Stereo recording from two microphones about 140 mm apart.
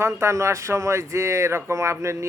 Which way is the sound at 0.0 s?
20° right (ahead or behind).